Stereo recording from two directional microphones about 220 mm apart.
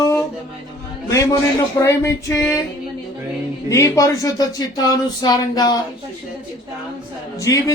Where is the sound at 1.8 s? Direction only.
15° left (ahead or behind).